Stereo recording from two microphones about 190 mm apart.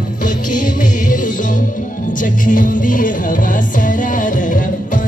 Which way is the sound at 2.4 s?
45° left (ahead or behind).